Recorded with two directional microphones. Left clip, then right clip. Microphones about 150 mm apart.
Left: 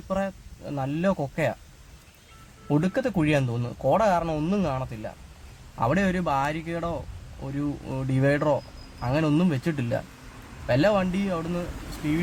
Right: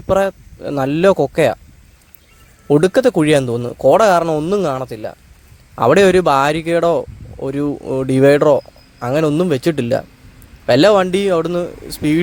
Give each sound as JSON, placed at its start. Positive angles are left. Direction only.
{"t": 0.1, "sound": "a man's voice", "side_deg": -50}
{"t": 2.6, "sound": "a man's voice", "side_deg": -45}
{"t": 4.3, "sound": "a man's voice", "side_deg": -30}
{"t": 4.5, "sound": "speech", "side_deg": -40}
{"t": 5.7, "sound": "a man's voice", "side_deg": -50}
{"t": 7.4, "sound": "a man's voice", "side_deg": -40}